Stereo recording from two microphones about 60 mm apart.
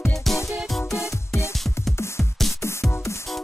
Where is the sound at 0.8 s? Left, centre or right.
Left.